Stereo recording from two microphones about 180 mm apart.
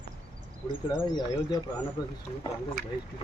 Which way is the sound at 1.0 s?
25° left (ahead or behind).